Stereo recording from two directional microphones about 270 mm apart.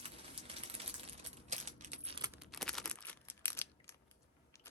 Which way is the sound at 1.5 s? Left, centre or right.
Right.